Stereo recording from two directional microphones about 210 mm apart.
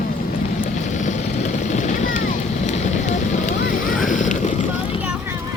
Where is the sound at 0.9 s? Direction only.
35° left (ahead or behind).